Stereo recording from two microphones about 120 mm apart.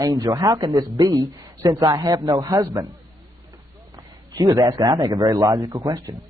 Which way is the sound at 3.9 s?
35° right (ahead or behind).